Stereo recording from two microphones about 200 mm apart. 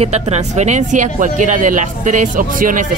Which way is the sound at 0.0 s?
35° right (ahead or behind).